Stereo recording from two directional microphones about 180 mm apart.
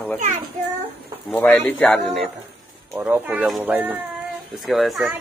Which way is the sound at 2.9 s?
10° right (ahead or behind).